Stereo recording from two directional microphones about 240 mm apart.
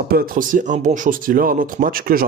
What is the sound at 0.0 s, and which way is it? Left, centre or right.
Speech, right.